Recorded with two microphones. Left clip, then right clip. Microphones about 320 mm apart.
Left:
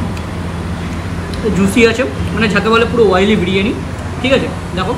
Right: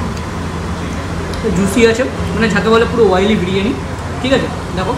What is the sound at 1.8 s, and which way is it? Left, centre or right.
Speech, centre.